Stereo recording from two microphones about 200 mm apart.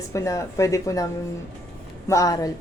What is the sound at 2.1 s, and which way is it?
Speech, 15° left (ahead or behind).